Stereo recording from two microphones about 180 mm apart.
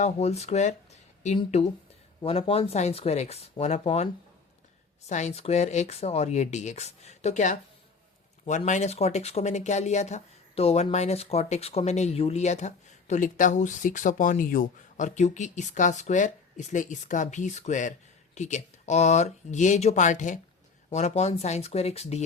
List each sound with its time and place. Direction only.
0.0 s speech: 35° left (ahead or behind)